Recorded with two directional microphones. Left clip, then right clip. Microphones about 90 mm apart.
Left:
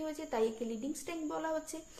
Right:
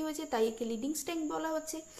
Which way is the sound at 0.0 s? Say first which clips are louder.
Right 2 dB; 50° right (ahead or behind).